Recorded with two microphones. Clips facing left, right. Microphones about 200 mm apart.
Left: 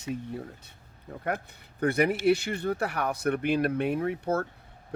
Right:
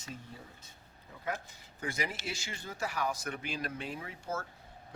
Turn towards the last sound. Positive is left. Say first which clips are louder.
# left 12 dB
turn(degrees=60)  # may be behind; listen again after turning